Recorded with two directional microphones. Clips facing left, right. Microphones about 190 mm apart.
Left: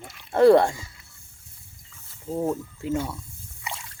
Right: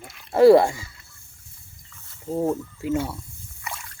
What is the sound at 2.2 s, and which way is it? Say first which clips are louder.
Speech: right 2 dB; 10° right (ahead or behind).